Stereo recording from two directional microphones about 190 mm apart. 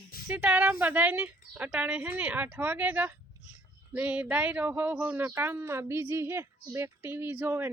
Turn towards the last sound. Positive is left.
turn(degrees=-10)  # may be behind; listen again after turning